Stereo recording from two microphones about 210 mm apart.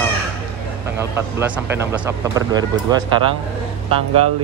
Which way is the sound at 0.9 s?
10° right (ahead or behind).